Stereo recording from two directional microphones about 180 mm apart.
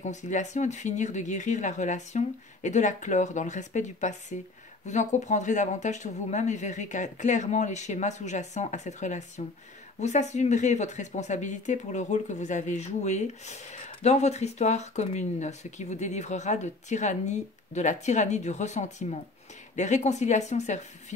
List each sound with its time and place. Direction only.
0.0 s speech: 40° left (ahead or behind)